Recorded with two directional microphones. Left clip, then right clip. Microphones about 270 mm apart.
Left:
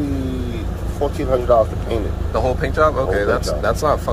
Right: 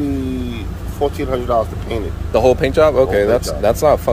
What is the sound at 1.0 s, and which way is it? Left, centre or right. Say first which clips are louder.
Speech: right 1 dB; right.